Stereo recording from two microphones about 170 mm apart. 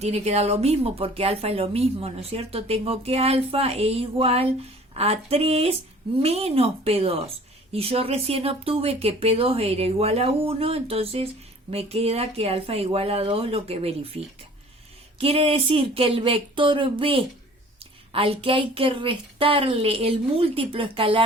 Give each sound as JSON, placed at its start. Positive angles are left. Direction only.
{"t": 0.0, "sound": "a woman's voice", "side_deg": -40}